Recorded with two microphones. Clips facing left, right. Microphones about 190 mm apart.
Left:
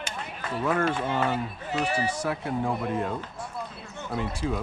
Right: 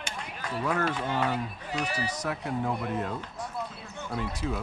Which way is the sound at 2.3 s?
5° left (ahead or behind).